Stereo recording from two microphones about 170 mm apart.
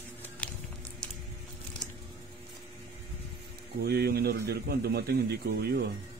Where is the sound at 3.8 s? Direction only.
70° right (ahead or behind).